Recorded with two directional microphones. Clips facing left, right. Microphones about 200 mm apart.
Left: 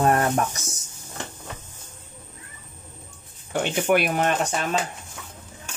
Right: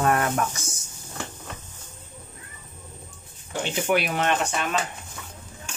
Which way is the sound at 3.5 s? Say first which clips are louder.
Left 3 dB; 55° left (ahead or behind).